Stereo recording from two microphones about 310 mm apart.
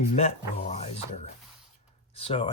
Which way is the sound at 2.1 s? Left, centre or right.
Centre.